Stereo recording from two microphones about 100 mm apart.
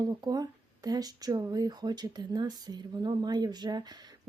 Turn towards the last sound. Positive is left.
turn(degrees=-45)  # may be behind; listen again after turning